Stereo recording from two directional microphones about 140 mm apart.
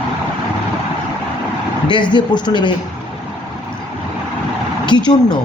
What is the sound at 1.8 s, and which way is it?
Speech, 35° left (ahead or behind).